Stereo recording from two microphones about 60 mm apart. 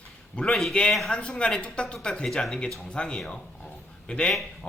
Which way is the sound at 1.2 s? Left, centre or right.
Centre.